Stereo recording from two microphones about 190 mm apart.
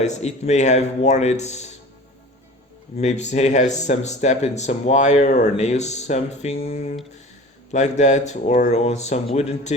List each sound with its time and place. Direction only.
0.0 s speech: 35° left (ahead or behind)
3.0 s speech: 35° left (ahead or behind)